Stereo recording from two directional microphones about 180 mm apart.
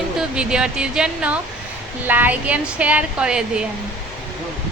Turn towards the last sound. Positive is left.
turn(degrees=-5)  # may be behind; listen again after turning